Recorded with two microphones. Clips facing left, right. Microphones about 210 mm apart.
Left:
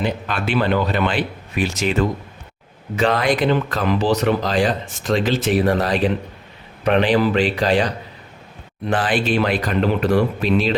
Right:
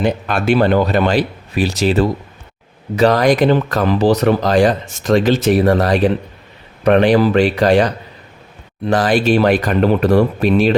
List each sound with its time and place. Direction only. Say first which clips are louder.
0.0 s speech: right 6 dB; 45° right (ahead or behind)
8.9 s speech: right 6 dB; 40° right (ahead or behind)